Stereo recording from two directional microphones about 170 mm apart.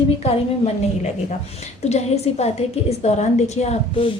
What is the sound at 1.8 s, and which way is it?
A woman's voice, 40° left (ahead or behind).